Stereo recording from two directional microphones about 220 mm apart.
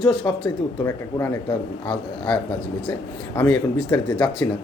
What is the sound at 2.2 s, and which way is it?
Speech, 5° left (ahead or behind).